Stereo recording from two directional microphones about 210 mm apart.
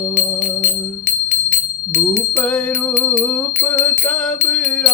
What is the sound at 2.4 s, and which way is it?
Music, 5° left (ahead or behind).